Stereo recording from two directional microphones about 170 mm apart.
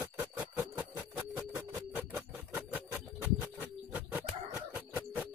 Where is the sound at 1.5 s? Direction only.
10° right (ahead or behind).